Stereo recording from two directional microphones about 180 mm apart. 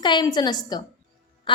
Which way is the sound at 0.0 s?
25° left (ahead or behind).